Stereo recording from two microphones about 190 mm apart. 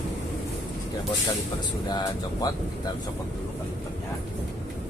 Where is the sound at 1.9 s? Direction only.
20° left (ahead or behind).